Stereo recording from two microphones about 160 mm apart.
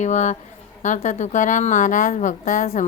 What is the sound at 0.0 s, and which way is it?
A woman's voice, 45° left (ahead or behind).